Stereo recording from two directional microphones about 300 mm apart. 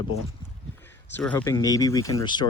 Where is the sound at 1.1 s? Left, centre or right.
Centre.